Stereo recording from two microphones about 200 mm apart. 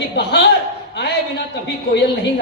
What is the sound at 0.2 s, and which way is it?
Speech, 55° left (ahead or behind).